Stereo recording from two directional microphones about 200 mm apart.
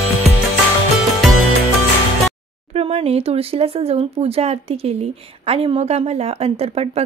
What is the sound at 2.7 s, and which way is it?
Speech, 30° right (ahead or behind).